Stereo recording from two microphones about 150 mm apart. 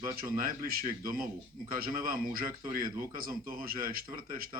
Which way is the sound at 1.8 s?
75° right (ahead or behind).